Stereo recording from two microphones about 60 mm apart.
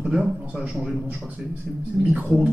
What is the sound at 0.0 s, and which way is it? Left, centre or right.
A woman's voice, centre.